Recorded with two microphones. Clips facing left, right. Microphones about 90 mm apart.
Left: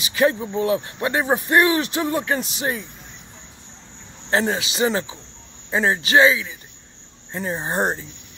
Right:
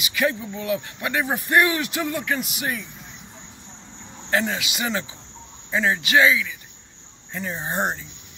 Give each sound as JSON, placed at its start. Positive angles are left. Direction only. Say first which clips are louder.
{"t": 0.0, "sound": "speech", "louder": "left 4 dB", "side_deg": 30}
{"t": 4.3, "sound": "speech", "louder": "left 3 dB", "side_deg": 35}